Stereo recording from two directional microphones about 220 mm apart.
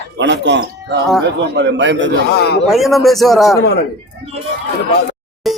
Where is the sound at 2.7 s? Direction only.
Centre (ahead or behind).